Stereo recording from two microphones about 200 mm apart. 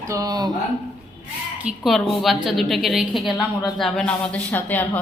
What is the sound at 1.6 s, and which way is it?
A woman's voice, centre (ahead or behind).